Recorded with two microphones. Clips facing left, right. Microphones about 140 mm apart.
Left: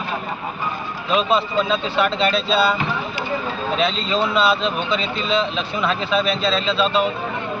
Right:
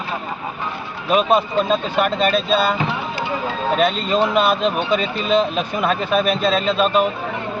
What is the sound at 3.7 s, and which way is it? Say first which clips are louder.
Speech: right 3 dB; 50° right (ahead or behind).